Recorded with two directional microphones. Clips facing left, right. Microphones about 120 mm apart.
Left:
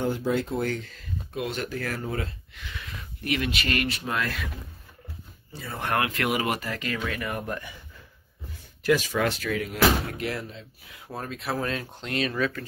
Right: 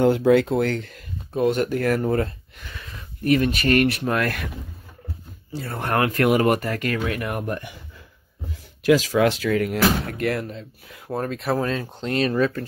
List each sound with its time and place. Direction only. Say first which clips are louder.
0.0 s speech: right 10 dB; 75° right (ahead or behind)
1.3 s speech: right 10 dB; 40° right (ahead or behind)
3.3 s speech: right 9 dB; 40° right (ahead or behind)
3.8 s speech: right 7 dB; 60° right (ahead or behind)
5.5 s speech: right 6 dB; 70° right (ahead or behind)
5.8 s speech: right 5 dB; 40° right (ahead or behind); by 7.5 s 60° right (ahead or behind)
8.8 s speech: right 6 dB; 90° right; by 12.6 s 35° right (ahead or behind)